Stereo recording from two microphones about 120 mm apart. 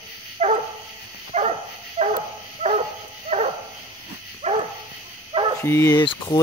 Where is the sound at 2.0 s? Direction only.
90° right.